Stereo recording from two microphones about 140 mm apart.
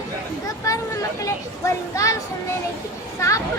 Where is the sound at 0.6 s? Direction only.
25° left (ahead or behind).